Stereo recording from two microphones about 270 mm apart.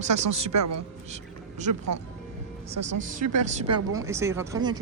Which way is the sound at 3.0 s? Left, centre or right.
Right.